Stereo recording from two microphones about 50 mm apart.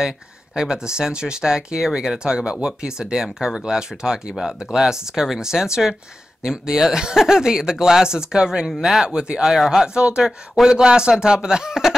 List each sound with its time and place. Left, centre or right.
0.6 s speech: centre